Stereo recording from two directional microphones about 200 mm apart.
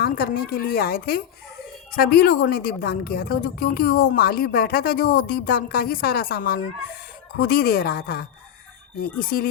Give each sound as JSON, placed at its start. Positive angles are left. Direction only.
{"t": 0.0, "sound": "a woman's voice", "side_deg": 50}